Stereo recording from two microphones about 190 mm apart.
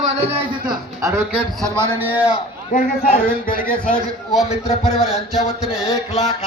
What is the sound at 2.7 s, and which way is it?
Speech, 50° left (ahead or behind).